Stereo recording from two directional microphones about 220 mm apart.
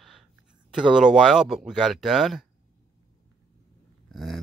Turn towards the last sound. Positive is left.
turn(degrees=0)  # may be behind; listen again after turning